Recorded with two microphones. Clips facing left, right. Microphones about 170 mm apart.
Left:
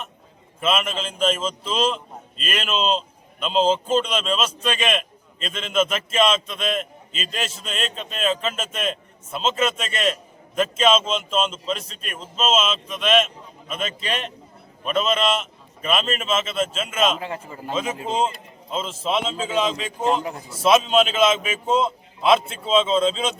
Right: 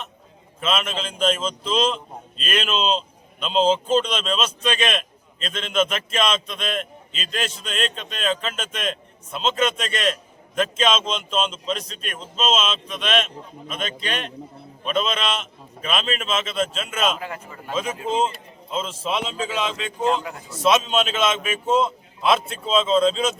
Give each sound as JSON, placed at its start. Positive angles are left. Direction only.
{"t": 0.6, "sound": "a man's voice", "side_deg": 5}
{"t": 17.2, "sound": "a man's voice", "side_deg": 25}
{"t": 18.7, "sound": "a man's voice", "side_deg": 0}